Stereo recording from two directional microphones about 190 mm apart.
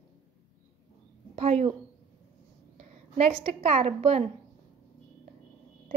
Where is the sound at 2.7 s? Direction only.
35° right (ahead or behind).